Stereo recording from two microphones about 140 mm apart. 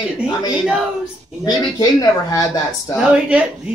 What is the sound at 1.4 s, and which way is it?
Speech, 25° left (ahead or behind).